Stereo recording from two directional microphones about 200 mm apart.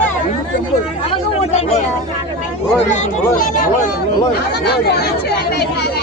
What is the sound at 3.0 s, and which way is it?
Speech, 40° left (ahead or behind).